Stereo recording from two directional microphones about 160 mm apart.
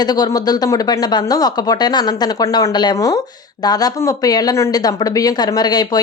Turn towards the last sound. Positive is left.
turn(degrees=25)  # may be behind; listen again after turning